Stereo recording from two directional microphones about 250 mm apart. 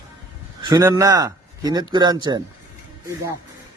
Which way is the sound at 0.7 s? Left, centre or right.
Centre.